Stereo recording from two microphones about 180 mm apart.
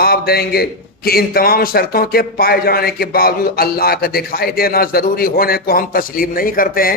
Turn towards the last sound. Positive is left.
turn(degrees=55)  # may be behind; listen again after turning